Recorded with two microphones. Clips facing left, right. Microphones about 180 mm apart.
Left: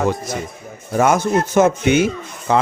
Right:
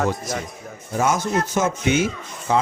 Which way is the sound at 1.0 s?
60° left (ahead or behind).